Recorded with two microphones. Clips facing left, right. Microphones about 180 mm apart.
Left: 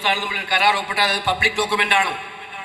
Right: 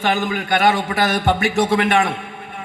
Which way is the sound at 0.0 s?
45° right (ahead or behind).